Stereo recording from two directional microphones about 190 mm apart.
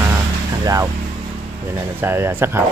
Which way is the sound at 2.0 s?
10° right (ahead or behind).